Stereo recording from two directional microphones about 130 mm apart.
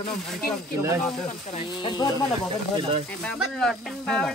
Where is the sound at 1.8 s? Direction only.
35° left (ahead or behind).